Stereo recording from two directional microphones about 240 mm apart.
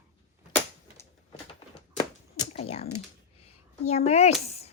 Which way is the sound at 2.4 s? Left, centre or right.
Left.